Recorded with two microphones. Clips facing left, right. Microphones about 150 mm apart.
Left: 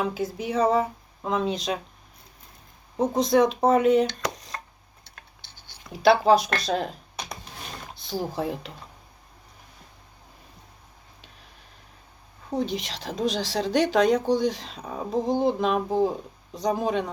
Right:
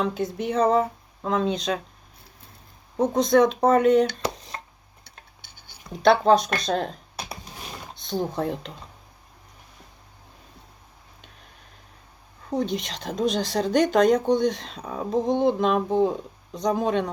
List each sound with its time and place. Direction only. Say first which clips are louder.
0.0 s a woman's voice: right 2 dB; 5° left (ahead or behind)
3.0 s a woman's voice: right 2 dB; centre (ahead or behind)
4.2 s a sound: right 2 dB; 25° right (ahead or behind)
5.9 s a woman's voice: right 1 dB; 5° left (ahead or behind)
6.6 s computer keyboard: right 1 dB; 5° left (ahead or behind)
7.9 s a woman's voice: right 2 dB; 5° left (ahead or behind)
12.5 s a woman's voice: right 2 dB; centre (ahead or behind)